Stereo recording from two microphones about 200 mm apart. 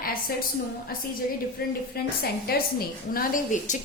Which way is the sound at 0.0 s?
45° left (ahead or behind).